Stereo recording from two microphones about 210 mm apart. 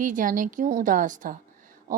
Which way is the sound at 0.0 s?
40° right (ahead or behind).